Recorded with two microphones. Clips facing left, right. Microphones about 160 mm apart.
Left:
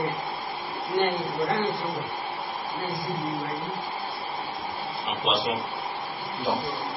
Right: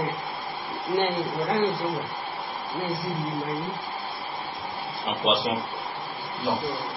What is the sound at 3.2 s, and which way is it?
Speech, centre (ahead or behind).